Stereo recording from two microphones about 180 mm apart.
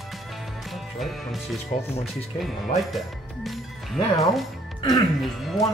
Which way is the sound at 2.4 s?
Centre (ahead or behind).